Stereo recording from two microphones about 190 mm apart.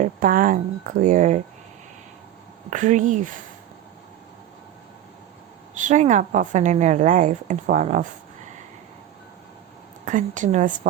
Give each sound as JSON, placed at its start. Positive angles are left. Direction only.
{"t": 0.0, "sound": "speech", "side_deg": -45}
{"t": 2.6, "sound": "a woman's voice", "side_deg": -40}
{"t": 5.8, "sound": "a woman's voice", "side_deg": -40}
{"t": 10.1, "sound": "a woman's voice", "side_deg": -40}